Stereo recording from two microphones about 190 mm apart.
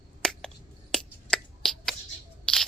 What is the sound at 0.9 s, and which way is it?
Finger snapping, centre (ahead or behind).